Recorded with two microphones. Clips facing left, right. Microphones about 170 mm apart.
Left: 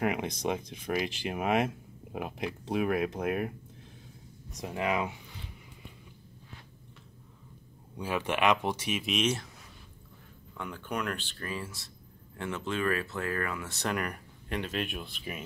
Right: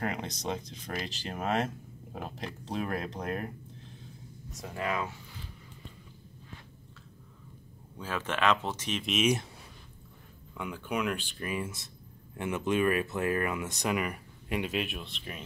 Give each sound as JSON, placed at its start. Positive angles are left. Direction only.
{"t": 0.0, "sound": "speech", "side_deg": 15}
{"t": 8.0, "sound": "speech", "side_deg": 15}
{"t": 10.6, "sound": "speech", "side_deg": -10}
{"t": 13.8, "sound": "speech", "side_deg": -5}